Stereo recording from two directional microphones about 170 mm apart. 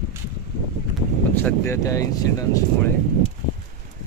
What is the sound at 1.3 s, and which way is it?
Speech, 15° left (ahead or behind).